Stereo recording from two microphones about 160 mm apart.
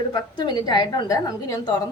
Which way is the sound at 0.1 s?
25° left (ahead or behind).